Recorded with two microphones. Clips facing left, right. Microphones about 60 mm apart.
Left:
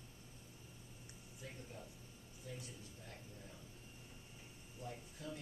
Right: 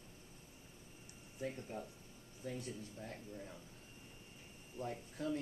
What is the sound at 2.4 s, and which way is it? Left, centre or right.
Speech, right.